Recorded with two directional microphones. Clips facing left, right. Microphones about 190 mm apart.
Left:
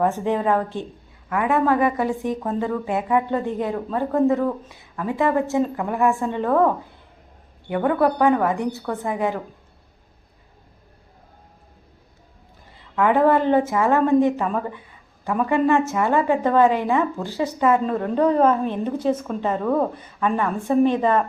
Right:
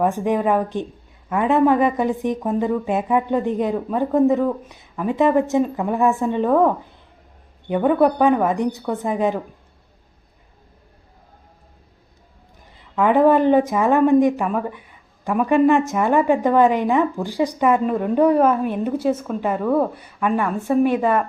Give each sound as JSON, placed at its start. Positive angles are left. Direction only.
{"t": 0.0, "sound": "a woman's voice", "side_deg": -15}
{"t": 13.0, "sound": "a woman's voice", "side_deg": -15}